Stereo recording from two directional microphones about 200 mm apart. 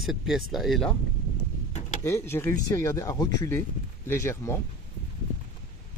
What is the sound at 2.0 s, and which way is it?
Speech, 15° left (ahead or behind).